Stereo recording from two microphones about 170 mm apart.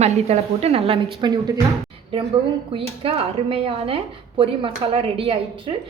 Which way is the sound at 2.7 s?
35° right (ahead or behind).